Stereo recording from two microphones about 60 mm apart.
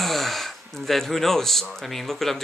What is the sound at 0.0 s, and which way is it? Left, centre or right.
Speech, centre.